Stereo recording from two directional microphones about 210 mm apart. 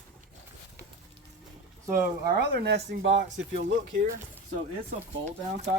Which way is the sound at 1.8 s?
45° right (ahead or behind).